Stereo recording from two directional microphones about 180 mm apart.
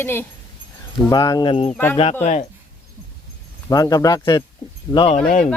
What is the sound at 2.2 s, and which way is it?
Speech, 40° left (ahead or behind).